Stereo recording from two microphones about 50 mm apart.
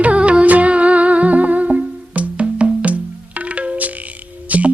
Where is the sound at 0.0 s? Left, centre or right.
Right.